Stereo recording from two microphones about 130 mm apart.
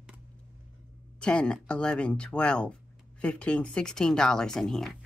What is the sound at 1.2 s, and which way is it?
Speech, 5° left (ahead or behind).